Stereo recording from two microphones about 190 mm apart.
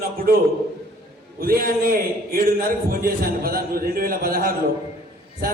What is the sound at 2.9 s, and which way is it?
A man's voice, 50° right (ahead or behind).